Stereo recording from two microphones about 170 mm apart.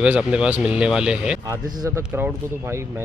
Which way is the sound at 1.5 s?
20° right (ahead or behind).